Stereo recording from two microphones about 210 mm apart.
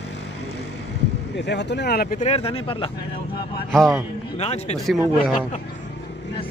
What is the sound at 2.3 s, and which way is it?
Speech, 25° left (ahead or behind).